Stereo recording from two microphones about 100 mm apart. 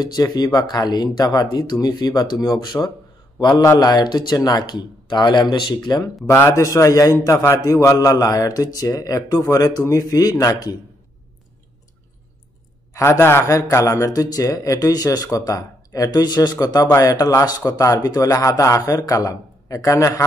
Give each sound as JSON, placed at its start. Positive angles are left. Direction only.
{"t": 0.0, "sound": "a man's voice", "side_deg": 40}
{"t": 6.2, "sound": "speech", "side_deg": 25}
{"t": 12.9, "sound": "speech", "side_deg": 30}